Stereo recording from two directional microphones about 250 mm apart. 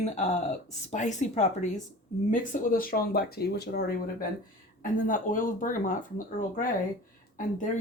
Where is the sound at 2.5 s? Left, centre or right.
Left.